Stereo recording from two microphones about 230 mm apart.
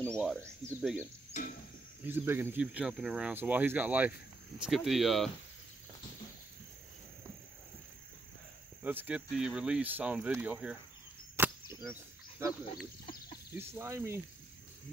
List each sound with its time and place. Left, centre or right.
0.0 s speech: centre
1.3 s cricket: left
2.0 s speech: centre
8.8 s speech: centre
11.3 s a sound: centre
13.6 s speech: centre